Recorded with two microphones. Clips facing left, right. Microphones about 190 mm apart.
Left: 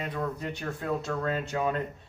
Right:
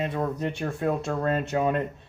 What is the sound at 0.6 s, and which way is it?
Speech, 45° right (ahead or behind).